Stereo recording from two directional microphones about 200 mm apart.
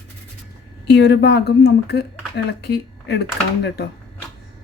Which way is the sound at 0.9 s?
55° left (ahead or behind).